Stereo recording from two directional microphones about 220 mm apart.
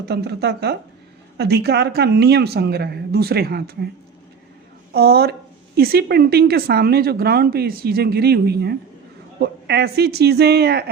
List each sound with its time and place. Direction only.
0.0 s speech: 45° right (ahead or behind)
4.9 s speech: 45° right (ahead or behind)